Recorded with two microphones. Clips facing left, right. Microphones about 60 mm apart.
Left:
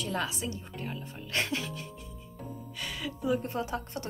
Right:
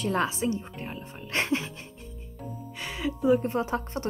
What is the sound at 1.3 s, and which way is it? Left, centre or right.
Music, right.